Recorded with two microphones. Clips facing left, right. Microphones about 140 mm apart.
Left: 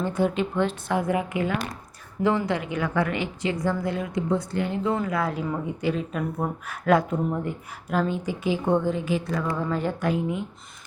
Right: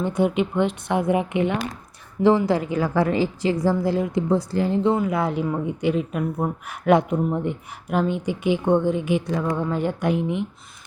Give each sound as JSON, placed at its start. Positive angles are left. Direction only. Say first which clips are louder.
{"t": 0.0, "sound": "a woman's voice", "louder": "right 3 dB", "side_deg": -15}
{"t": 5.5, "sound": "speech", "louder": "right 4 dB", "side_deg": -15}
{"t": 9.6, "sound": "speech", "louder": "right 3 dB", "side_deg": -15}